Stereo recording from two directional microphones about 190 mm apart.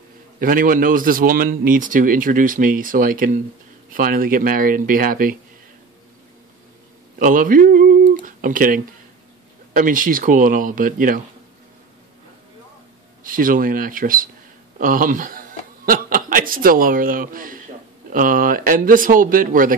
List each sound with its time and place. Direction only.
0.4 s a man's voice: 45° right (ahead or behind)
7.2 s a sound: 45° right (ahead or behind)
9.8 s a man's voice: 45° right (ahead or behind)
13.2 s a man's voice: 45° right (ahead or behind)